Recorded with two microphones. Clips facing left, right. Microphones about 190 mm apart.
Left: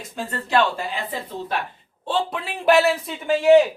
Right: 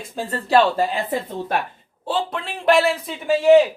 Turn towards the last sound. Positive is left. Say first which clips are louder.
# right 1 dB
turn(degrees=0)  # may be behind; listen again after turning